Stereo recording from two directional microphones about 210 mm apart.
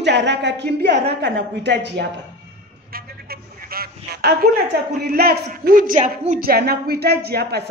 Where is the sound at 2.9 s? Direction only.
45° right (ahead or behind).